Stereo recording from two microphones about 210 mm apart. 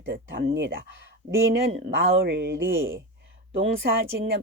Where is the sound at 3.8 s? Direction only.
50° right (ahead or behind).